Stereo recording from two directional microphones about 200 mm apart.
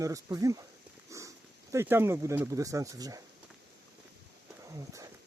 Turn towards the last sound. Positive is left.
turn(degrees=-15)  # may be behind; listen again after turning